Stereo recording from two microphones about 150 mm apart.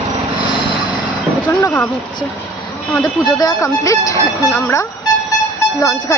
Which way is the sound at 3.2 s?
25° left (ahead or behind).